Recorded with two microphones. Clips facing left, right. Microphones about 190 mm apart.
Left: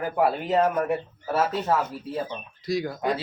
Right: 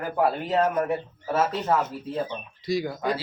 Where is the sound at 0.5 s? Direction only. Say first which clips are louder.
Left 1 dB; 15° left (ahead or behind).